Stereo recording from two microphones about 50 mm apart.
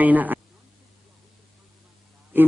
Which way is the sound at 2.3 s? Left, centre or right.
Right.